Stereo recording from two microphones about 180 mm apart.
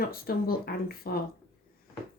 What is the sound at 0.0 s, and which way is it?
Speech, 55° left (ahead or behind).